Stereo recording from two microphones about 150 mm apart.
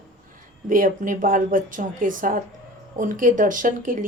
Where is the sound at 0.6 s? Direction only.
65° right (ahead or behind).